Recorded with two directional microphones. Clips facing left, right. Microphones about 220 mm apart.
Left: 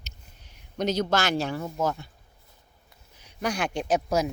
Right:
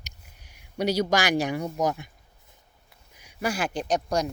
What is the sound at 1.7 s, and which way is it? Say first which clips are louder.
Speech: even; 15° right (ahead or behind).